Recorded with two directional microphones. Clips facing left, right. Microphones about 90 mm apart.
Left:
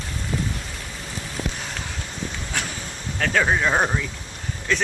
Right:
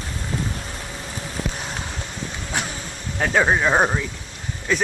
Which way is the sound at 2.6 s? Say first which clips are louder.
Right 2 dB; 20° right (ahead or behind).